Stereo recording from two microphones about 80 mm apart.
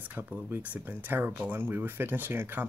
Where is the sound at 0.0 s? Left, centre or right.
Right.